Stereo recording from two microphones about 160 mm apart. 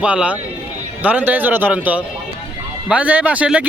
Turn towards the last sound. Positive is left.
turn(degrees=-10)  # may be behind; listen again after turning